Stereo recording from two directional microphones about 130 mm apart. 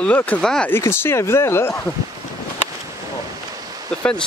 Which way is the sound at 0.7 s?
20° left (ahead or behind).